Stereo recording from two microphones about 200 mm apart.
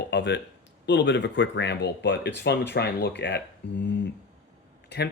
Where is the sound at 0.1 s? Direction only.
60° left (ahead or behind).